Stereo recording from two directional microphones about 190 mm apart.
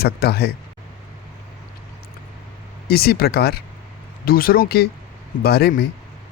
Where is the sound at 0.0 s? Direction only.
55° left (ahead or behind).